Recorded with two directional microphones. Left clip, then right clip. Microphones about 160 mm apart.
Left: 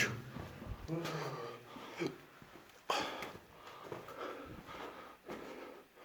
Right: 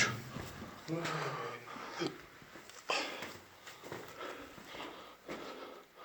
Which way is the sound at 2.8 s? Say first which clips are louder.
Right 1 dB; 40° left (ahead or behind).